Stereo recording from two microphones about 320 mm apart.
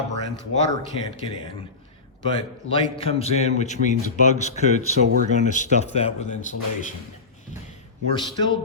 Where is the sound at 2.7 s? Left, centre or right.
Centre.